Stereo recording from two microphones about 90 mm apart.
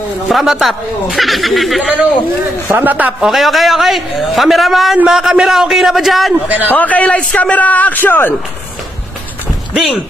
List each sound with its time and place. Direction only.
0.3 s a man's voice: centre (ahead or behind)
2.7 s a man's voice: 20° right (ahead or behind)
3.3 s a man's voice: centre (ahead or behind)
6.7 s a man's voice: 15° left (ahead or behind)